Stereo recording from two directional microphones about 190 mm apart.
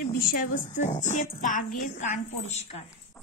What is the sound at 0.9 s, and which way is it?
Music, 40° left (ahead or behind).